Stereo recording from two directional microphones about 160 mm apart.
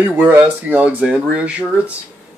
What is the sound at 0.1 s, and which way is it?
Speech, 10° right (ahead or behind).